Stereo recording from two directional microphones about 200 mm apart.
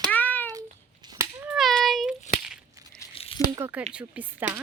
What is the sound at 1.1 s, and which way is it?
A child's voice, 15° right (ahead or behind).